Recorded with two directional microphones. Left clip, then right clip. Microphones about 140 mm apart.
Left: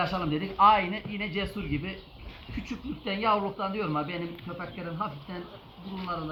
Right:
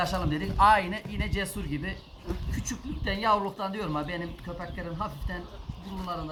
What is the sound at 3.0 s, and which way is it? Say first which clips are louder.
Speech: right 1 dB; 20° right (ahead or behind).